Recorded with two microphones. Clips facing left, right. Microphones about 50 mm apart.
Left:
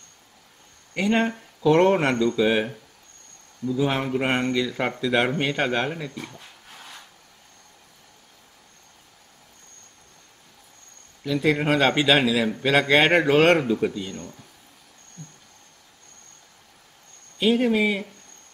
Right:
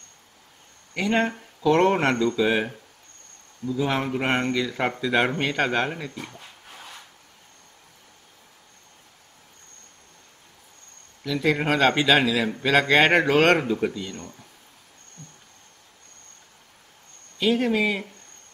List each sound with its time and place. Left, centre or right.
0.9 s a man's voice: centre
1.9 s a man's voice: centre
6.3 s a sound: right
11.4 s a man's voice: centre
13.6 s speech: centre
17.4 s a man's voice: centre